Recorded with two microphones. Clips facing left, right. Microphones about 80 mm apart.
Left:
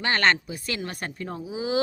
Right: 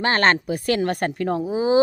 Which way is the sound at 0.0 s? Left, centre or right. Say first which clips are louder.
Right 4 dB; right.